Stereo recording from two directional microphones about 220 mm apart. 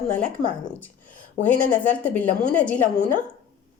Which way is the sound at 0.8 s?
5° left (ahead or behind).